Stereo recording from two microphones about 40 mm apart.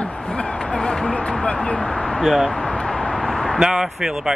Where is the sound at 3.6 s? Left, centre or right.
Centre.